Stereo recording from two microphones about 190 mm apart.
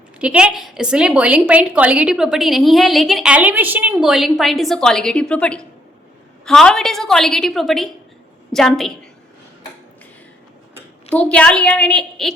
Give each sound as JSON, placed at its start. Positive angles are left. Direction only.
{"t": 0.2, "sound": "a woman's voice", "side_deg": -5}
{"t": 11.1, "sound": "a woman's voice", "side_deg": 5}